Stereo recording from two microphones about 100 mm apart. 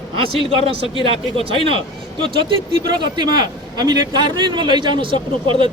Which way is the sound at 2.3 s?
60° right (ahead or behind).